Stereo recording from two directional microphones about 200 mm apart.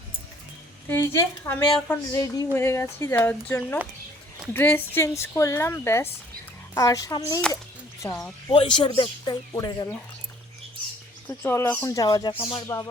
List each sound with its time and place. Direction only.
0.9 s speech: 10° left (ahead or behind)
8.4 s speech: 25° left (ahead or behind)
11.3 s speech: 10° left (ahead or behind); by 12.6 s 25° left (ahead or behind)